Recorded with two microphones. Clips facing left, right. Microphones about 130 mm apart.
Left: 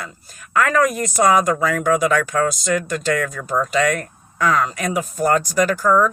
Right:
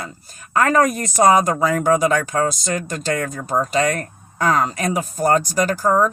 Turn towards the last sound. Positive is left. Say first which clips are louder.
# left 1 dB
turn(degrees=-30)  # may be behind; listen again after turning